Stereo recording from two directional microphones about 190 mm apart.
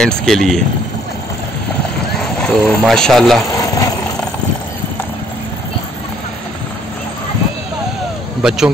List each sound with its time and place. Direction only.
0.0 s speech: centre (ahead or behind)
2.1 s speech: 5° left (ahead or behind)
3.5 s vehicle: 15° left (ahead or behind)
8.4 s speech: 5° right (ahead or behind)